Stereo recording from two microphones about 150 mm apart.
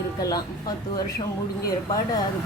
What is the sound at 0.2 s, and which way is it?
Speech, 25° left (ahead or behind).